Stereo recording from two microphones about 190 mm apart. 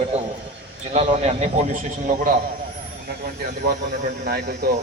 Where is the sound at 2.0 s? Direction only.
45° right (ahead or behind).